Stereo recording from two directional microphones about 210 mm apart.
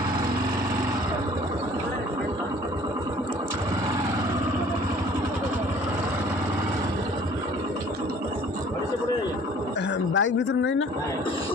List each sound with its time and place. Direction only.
10.2 s speech: 60° left (ahead or behind)